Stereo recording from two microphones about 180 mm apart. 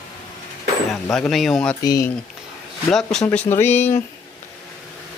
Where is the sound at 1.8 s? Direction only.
20° left (ahead or behind).